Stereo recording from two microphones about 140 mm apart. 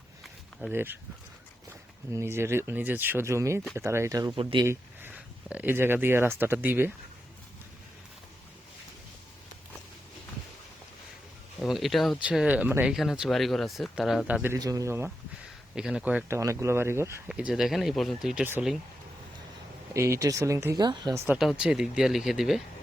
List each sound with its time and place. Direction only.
0.7 s speech: 15° right (ahead or behind)
2.1 s speech: 20° right (ahead or behind)
11.6 s speech: centre (ahead or behind)
14.5 s speech: 25° right (ahead or behind)
15.7 s speech: 5° right (ahead or behind)
16.4 s speech: 20° right (ahead or behind)
17.2 s speech: 5° right (ahead or behind)
19.9 s speech: 20° right (ahead or behind)
20.8 s speech: 30° right (ahead or behind)
21.3 s speech: 5° right (ahead or behind)